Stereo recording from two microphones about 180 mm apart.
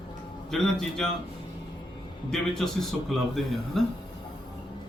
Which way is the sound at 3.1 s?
Centre (ahead or behind).